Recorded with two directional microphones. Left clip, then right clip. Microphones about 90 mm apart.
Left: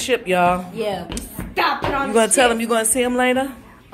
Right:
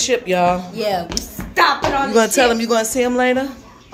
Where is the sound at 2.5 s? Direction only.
30° right (ahead or behind).